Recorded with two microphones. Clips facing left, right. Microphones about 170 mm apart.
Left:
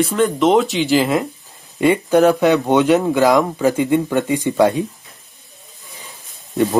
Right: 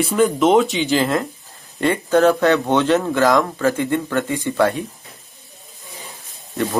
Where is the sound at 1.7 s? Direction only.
15° left (ahead or behind).